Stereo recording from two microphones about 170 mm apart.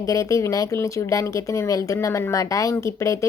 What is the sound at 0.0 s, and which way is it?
Speech, 20° left (ahead or behind).